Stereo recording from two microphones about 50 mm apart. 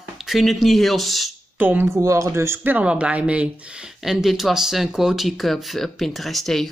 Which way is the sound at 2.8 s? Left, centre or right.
Right.